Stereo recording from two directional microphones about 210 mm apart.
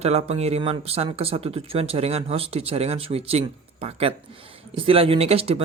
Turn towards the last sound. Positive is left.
turn(degrees=-30)  # may be behind; listen again after turning